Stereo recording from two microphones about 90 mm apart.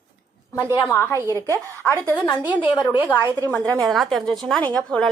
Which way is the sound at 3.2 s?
25° right (ahead or behind).